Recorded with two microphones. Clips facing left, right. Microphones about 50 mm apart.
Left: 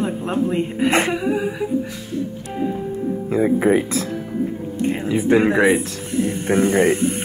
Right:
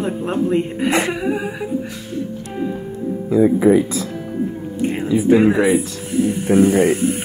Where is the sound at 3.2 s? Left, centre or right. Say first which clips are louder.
Right 4 dB; left.